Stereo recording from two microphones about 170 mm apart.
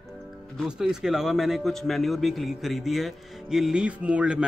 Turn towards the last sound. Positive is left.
turn(degrees=-5)  # may be behind; listen again after turning